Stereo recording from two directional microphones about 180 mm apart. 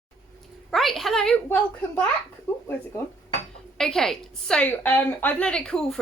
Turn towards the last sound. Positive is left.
turn(degrees=5)  # may be behind; listen again after turning